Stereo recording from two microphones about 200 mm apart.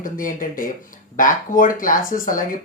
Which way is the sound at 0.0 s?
45° left (ahead or behind).